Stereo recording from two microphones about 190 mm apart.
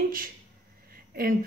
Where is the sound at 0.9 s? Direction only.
50° right (ahead or behind).